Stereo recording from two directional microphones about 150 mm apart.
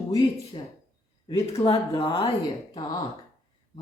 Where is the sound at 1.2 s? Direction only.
20° left (ahead or behind).